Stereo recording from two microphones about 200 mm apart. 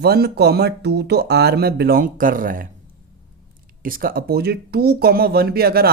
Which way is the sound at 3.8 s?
45° right (ahead or behind).